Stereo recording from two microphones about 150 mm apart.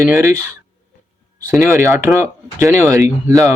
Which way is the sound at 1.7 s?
20° right (ahead or behind).